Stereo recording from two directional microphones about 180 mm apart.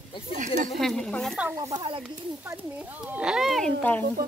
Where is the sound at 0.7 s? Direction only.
5° left (ahead or behind).